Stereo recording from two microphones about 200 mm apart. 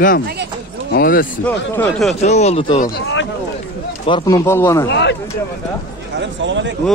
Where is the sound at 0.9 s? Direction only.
50° left (ahead or behind).